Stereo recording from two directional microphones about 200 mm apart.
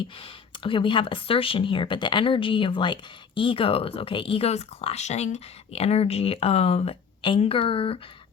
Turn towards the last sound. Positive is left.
turn(degrees=30)  # may be behind; listen again after turning